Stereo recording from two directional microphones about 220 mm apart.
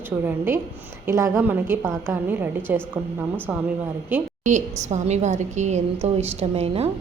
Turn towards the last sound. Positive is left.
turn(degrees=-30)  # may be behind; listen again after turning